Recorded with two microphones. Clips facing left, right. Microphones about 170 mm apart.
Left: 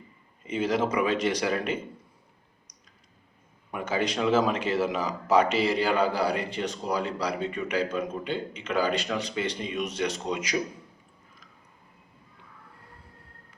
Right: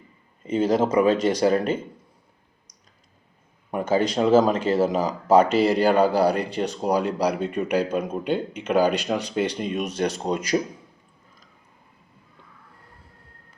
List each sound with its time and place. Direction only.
0.6 s speech: 45° right (ahead or behind)
3.7 s speech: 40° right (ahead or behind)
9.8 s speech: 40° right (ahead or behind)